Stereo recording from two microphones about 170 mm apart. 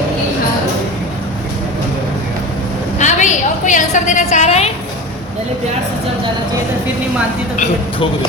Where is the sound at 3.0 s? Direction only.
45° left (ahead or behind).